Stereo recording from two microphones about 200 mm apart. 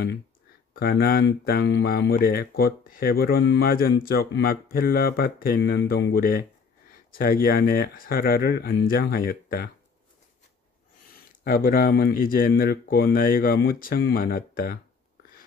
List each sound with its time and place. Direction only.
0.7 s speech: 50° left (ahead or behind)
11.4 s speech: 50° left (ahead or behind)